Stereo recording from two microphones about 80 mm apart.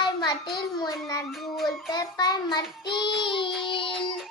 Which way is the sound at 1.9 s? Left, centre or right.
Left.